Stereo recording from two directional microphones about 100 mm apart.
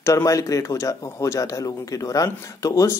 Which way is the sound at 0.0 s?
35° left (ahead or behind).